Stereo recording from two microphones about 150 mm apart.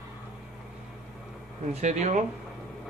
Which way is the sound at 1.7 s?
50° right (ahead or behind).